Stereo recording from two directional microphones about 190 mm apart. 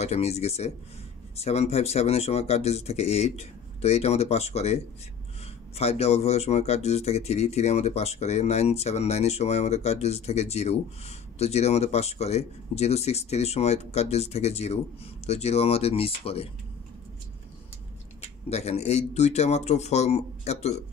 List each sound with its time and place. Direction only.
0.0 s speech: 35° left (ahead or behind)
5.8 s speech: 35° left (ahead or behind)
18.5 s speech: 35° left (ahead or behind)